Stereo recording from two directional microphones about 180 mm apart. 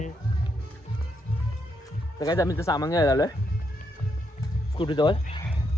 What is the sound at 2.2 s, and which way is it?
Speech, 20° left (ahead or behind).